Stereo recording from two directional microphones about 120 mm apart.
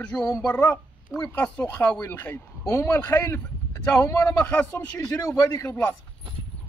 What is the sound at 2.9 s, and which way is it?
A man's voice, 15° left (ahead or behind).